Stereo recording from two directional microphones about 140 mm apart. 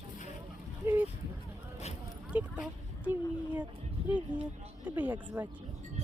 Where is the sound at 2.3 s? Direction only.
10° right (ahead or behind).